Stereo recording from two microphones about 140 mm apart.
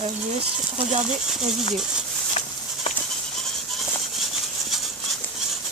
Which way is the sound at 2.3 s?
50° left (ahead or behind).